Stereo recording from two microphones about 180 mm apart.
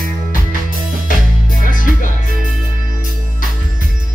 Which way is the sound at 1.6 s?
45° left (ahead or behind).